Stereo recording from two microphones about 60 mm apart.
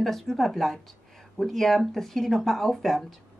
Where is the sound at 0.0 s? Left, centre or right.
Centre.